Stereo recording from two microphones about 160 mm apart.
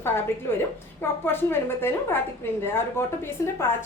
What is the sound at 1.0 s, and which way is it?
A woman's voice, 15° left (ahead or behind).